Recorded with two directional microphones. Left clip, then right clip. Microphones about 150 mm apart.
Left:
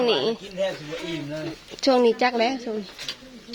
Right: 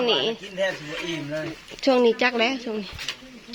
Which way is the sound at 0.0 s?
5° left (ahead or behind).